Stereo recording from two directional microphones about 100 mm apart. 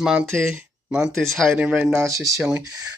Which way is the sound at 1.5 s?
10° right (ahead or behind).